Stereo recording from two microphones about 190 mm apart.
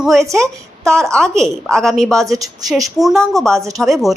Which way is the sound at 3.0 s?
Centre (ahead or behind).